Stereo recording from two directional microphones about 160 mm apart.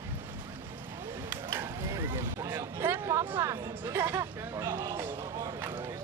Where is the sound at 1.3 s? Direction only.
15° right (ahead or behind).